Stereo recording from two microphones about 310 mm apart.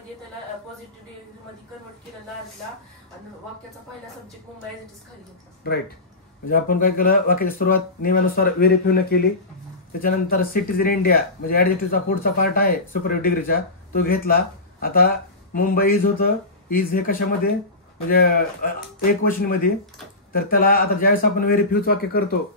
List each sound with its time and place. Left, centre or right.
6.5 s speech: left